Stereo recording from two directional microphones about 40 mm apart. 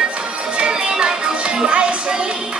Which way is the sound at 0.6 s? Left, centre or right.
Right.